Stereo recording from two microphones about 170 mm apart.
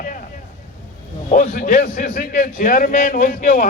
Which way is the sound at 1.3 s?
50° left (ahead or behind).